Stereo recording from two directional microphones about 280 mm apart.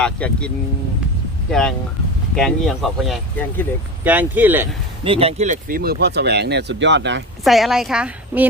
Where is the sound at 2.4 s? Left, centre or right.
Centre.